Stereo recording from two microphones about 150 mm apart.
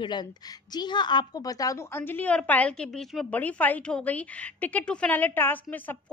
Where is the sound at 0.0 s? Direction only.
30° left (ahead or behind).